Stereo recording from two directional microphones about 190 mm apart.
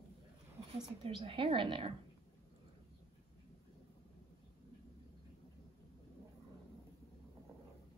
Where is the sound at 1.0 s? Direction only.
30° right (ahead or behind).